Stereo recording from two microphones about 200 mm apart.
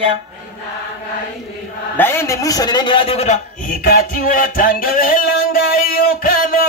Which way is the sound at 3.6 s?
45° left (ahead or behind).